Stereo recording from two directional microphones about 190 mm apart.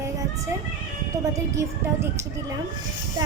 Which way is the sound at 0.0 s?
15° right (ahead or behind).